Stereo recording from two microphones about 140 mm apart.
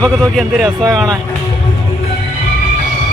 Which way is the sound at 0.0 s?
Centre (ahead or behind).